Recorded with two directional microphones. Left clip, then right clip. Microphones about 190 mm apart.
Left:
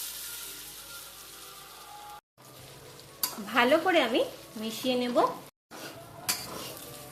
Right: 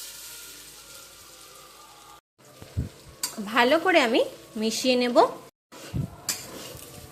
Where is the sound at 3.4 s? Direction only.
25° right (ahead or behind).